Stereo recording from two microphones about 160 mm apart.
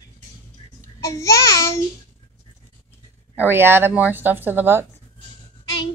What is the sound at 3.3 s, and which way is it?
A woman's voice, 15° right (ahead or behind).